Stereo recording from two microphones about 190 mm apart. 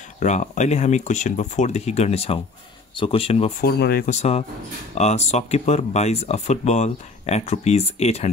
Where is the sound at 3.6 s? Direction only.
55° left (ahead or behind).